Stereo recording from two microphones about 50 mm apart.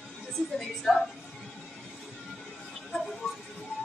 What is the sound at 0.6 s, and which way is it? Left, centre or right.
Speech, centre.